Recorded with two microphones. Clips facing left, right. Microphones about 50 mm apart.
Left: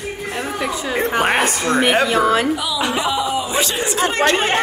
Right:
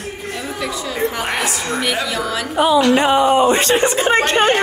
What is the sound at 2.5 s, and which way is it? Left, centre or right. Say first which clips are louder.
A woman's voice: right 7 dB; right.